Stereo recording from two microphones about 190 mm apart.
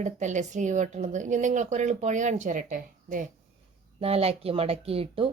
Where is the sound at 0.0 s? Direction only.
40° right (ahead or behind).